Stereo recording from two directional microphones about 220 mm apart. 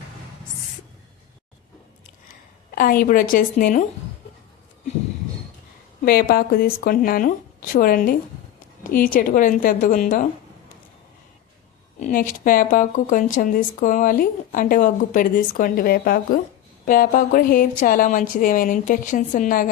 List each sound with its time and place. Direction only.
2.7 s speech: 40° left (ahead or behind)
6.1 s speech: 40° left (ahead or behind)
11.9 s speech: 35° left (ahead or behind)